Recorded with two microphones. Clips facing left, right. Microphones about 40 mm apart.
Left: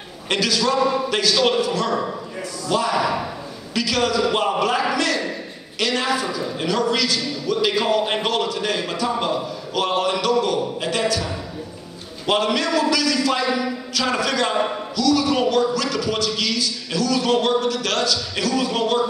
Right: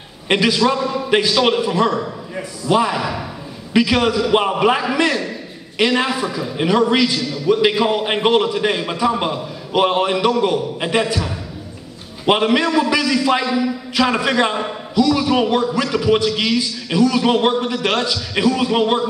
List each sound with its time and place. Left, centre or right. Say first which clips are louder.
0.3 s a man's voice: right 4 dB; right